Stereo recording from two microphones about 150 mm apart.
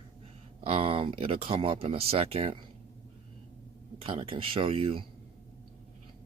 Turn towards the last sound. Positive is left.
turn(degrees=-40)  # may be behind; listen again after turning